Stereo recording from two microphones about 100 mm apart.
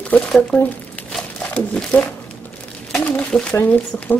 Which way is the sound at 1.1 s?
5° left (ahead or behind).